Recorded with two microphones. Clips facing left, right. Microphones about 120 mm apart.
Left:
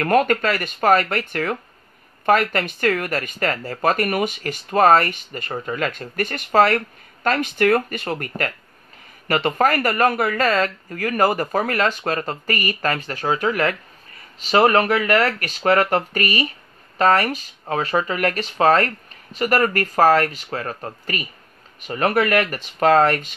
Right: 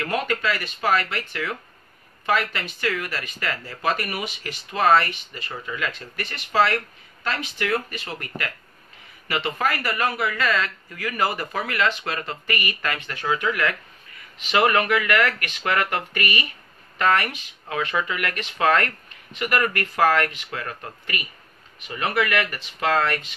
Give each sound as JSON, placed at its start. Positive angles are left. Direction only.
{"t": 0.0, "sound": "speech", "side_deg": 50}
{"t": 9.3, "sound": "speech", "side_deg": 45}